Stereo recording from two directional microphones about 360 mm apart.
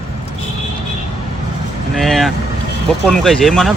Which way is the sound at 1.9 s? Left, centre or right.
Centre.